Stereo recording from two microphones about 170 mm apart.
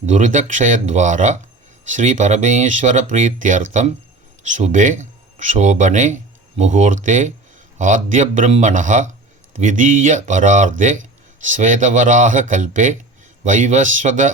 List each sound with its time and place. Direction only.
0.0 s speech: 45° right (ahead or behind)